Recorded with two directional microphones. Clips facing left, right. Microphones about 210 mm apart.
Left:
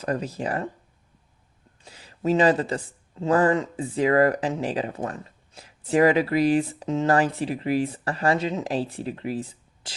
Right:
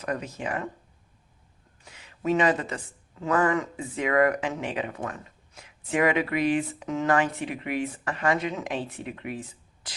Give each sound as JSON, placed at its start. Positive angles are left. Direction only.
{"t": 0.0, "sound": "speech", "side_deg": 30}
{"t": 1.8, "sound": "speech", "side_deg": 35}